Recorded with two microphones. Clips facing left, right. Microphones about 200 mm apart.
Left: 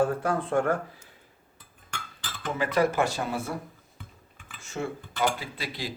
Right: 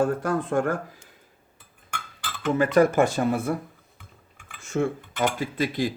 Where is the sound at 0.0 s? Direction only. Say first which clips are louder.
Right 2 dB; 45° right (ahead or behind).